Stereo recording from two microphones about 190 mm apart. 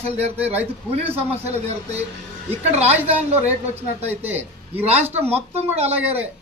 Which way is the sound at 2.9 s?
10° right (ahead or behind).